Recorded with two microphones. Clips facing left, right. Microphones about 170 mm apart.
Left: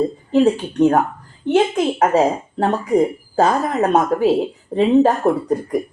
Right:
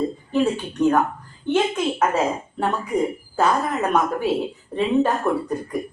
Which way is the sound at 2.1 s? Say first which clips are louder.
Left 6 dB; 40° left (ahead or behind).